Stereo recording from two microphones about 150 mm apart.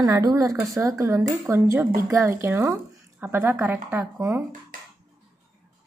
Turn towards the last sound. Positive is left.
turn(degrees=-20)  # may be behind; listen again after turning